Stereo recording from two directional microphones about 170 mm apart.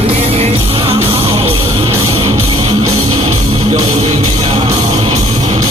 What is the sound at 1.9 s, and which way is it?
Music, 15° right (ahead or behind).